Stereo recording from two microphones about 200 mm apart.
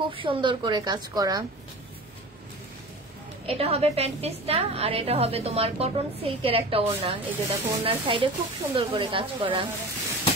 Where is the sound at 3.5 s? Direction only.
30° right (ahead or behind).